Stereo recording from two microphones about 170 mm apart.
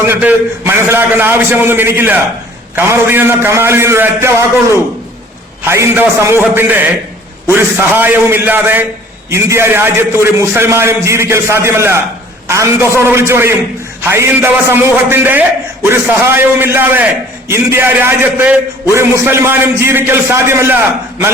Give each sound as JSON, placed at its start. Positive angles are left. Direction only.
{"t": 0.0, "sound": "a man's voice", "side_deg": -10}